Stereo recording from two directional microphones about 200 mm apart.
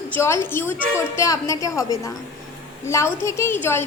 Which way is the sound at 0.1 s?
15° left (ahead or behind).